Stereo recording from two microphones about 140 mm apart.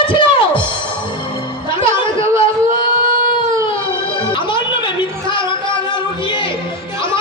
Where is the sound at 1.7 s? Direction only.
40° left (ahead or behind).